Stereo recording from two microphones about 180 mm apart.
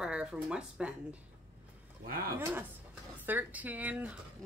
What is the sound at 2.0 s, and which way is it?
Speech, 55° right (ahead or behind).